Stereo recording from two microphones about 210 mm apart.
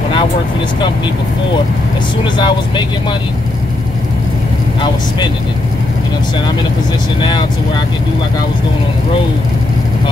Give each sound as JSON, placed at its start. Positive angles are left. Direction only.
{"t": 2.3, "sound": "speech", "side_deg": 20}